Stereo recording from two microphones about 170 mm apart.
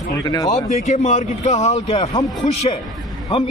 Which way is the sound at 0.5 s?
40° left (ahead or behind).